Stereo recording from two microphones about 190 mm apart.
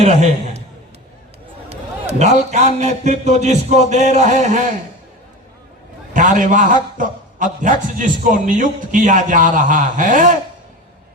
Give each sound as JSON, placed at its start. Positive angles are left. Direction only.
{"t": 0.0, "sound": "a man's voice", "side_deg": -35}
{"t": 1.7, "sound": "a sound", "side_deg": -35}
{"t": 2.5, "sound": "a man's voice", "side_deg": -35}
{"t": 6.1, "sound": "a man's voice", "side_deg": -45}